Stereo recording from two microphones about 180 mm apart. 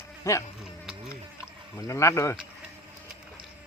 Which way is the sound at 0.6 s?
5° right (ahead or behind).